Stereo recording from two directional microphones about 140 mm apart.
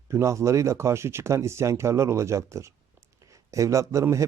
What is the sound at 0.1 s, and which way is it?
A man's voice, 20° right (ahead or behind).